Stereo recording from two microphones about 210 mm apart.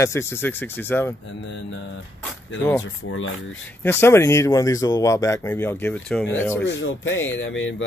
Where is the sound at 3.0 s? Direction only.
70° left (ahead or behind).